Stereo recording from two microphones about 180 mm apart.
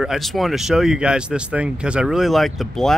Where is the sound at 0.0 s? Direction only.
Centre (ahead or behind).